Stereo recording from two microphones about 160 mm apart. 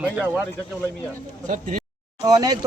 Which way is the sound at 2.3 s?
25° right (ahead or behind).